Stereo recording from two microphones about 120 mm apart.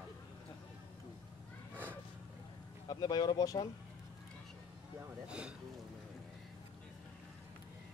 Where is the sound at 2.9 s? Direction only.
35° left (ahead or behind).